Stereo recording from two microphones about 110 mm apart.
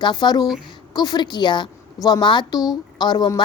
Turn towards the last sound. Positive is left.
turn(degrees=40)  # may be behind; listen again after turning